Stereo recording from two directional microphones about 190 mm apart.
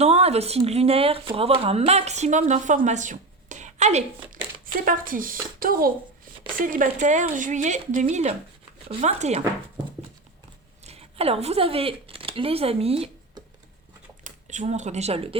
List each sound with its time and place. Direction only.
0.0 s speech: 35° right (ahead or behind)
10.8 s speech: 30° right (ahead or behind)